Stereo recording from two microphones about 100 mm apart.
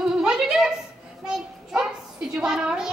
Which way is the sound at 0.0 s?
5° right (ahead or behind).